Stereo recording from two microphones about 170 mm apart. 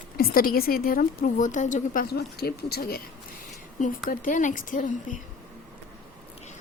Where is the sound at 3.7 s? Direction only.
50° left (ahead or behind).